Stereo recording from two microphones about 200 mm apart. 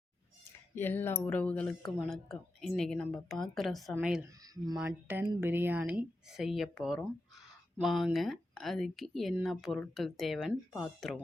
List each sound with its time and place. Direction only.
0.8 s speech: 10° left (ahead or behind)